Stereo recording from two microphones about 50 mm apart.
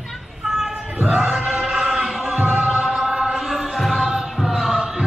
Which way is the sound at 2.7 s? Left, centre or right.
Centre.